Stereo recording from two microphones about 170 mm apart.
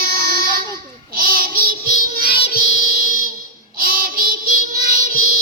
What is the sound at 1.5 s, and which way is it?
Music, 60° right (ahead or behind).